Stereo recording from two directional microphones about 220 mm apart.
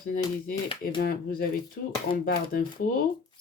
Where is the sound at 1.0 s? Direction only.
40° left (ahead or behind).